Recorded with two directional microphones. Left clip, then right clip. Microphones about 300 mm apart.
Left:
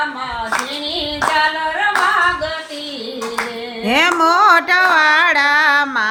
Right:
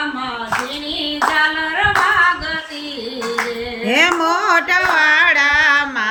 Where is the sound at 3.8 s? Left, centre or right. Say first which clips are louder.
Left 1 dB; centre.